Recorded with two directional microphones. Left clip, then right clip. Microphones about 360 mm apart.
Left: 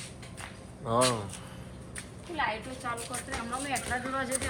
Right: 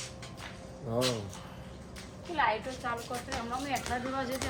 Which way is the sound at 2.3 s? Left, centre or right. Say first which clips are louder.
Right 3 dB; right.